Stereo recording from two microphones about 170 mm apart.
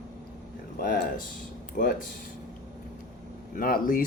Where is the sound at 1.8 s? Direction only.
55° left (ahead or behind).